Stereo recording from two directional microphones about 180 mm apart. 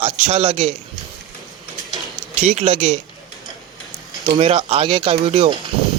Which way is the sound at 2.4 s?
40° right (ahead or behind).